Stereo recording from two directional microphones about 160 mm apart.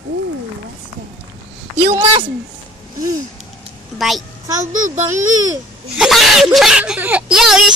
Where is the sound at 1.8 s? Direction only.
40° right (ahead or behind).